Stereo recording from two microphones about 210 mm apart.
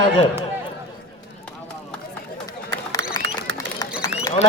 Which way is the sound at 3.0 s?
60° right (ahead or behind).